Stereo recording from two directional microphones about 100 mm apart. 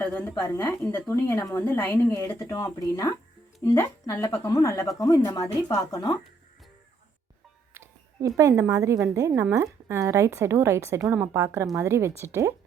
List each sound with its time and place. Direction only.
0.0 s a woman's voice: 20° left (ahead or behind); by 6.1 s 40° left (ahead or behind)
8.4 s a woman's voice: 35° right (ahead or behind)